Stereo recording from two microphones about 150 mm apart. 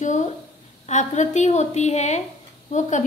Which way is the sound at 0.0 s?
55° left (ahead or behind).